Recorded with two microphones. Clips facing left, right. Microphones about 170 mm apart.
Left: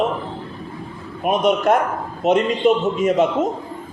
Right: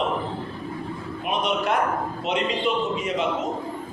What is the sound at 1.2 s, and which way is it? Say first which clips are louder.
A man's voice: left 8 dB; 45° left (ahead or behind).